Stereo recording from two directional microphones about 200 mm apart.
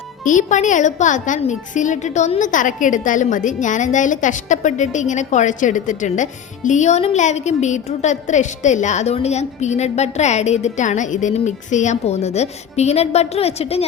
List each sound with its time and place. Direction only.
0.3 s a woman's voice: 40° left (ahead or behind)